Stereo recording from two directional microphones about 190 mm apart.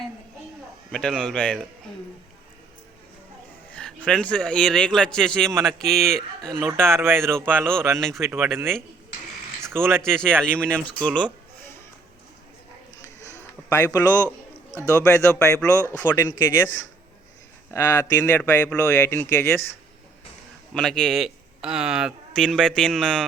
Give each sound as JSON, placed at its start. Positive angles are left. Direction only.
{"t": 0.9, "sound": "speech", "side_deg": 0}
{"t": 3.7, "sound": "speech", "side_deg": 5}
{"t": 6.6, "sound": "speech", "side_deg": -10}
{"t": 7.9, "sound": "speech", "side_deg": 0}
{"t": 8.2, "sound": "speech", "side_deg": -10}
{"t": 9.7, "sound": "speech", "side_deg": -10}
{"t": 10.0, "sound": "speech", "side_deg": 5}
{"t": 11.0, "sound": "music", "side_deg": 5}
{"t": 13.1, "sound": "a sound", "side_deg": 15}
{"t": 14.8, "sound": "speech", "side_deg": 15}
{"t": 17.7, "sound": "speech", "side_deg": 15}
{"t": 20.7, "sound": "speech", "side_deg": 5}